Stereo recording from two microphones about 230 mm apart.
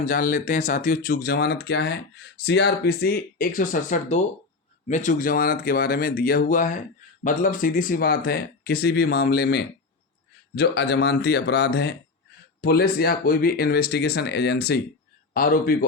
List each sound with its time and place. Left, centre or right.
0.0 s speech: left